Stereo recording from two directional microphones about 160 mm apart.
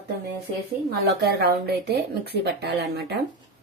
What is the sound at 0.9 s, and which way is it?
Speech, 80° right.